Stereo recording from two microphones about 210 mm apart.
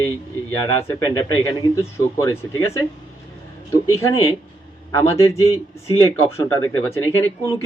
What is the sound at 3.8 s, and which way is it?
Speech, 15° left (ahead or behind).